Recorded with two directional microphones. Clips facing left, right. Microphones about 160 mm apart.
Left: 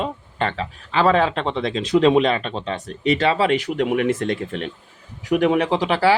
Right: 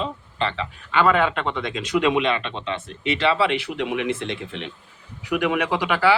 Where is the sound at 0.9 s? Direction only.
30° left (ahead or behind).